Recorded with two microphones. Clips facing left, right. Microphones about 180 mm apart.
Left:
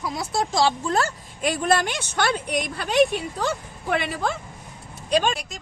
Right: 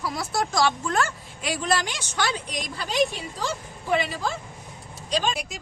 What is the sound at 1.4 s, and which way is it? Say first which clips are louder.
A woman's voice: left 4 dB; 50° left (ahead or behind).